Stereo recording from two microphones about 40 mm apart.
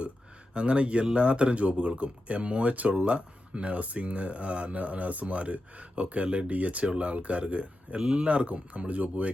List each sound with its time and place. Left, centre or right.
0.5 s speech: right
8.0 s speech: centre
8.3 s speech: right